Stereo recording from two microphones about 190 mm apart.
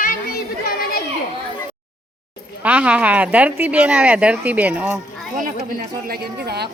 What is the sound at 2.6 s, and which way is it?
A woman's voice, 10° right (ahead or behind).